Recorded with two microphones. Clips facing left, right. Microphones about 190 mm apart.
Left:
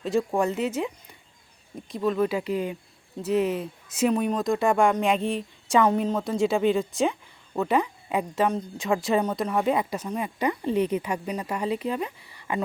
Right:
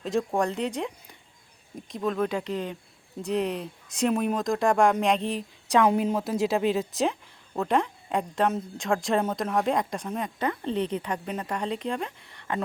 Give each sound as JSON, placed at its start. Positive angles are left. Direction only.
{"t": 0.0, "sound": "speech", "side_deg": 0}